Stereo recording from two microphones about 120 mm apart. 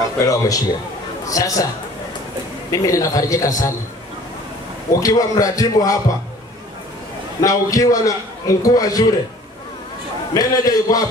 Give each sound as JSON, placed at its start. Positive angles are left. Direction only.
{"t": 0.2, "sound": "a man's voice", "side_deg": 30}
{"t": 2.7, "sound": "a man's voice", "side_deg": 30}
{"t": 5.0, "sound": "a man's voice", "side_deg": 30}
{"t": 7.4, "sound": "a man's voice", "side_deg": 30}
{"t": 10.3, "sound": "a man's voice", "side_deg": 30}